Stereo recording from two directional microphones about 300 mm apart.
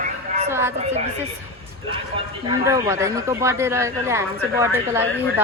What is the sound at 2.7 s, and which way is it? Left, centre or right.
A woman's voice, centre.